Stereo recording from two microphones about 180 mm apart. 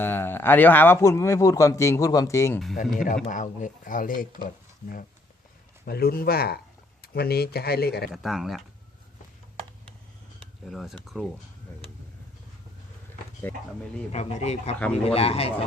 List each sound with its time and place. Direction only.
0.0 s a man's voice: 10° left (ahead or behind)
3.2 s speech: 45° left (ahead or behind); by 8.1 s 60° left (ahead or behind)
8.1 s speech: centre (ahead or behind)
10.7 s speech: centre (ahead or behind)
13.5 s a man's voice: 10° left (ahead or behind)
14.1 s speech: 35° left (ahead or behind)